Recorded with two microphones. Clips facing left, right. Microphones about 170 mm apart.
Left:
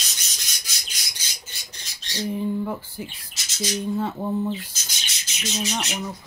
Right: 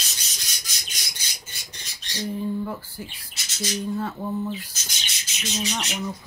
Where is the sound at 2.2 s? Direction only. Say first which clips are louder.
Left 2 dB; 15° left (ahead or behind).